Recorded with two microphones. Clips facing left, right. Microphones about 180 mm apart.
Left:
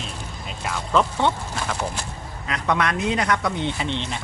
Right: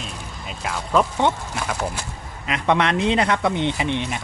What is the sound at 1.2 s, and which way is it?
Speech, 15° right (ahead or behind).